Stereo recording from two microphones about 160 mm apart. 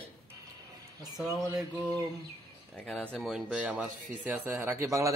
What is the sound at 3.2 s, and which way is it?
A man's voice, 5° right (ahead or behind).